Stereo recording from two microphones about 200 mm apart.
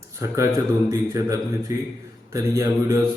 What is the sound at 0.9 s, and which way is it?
Mantra, 15° right (ahead or behind).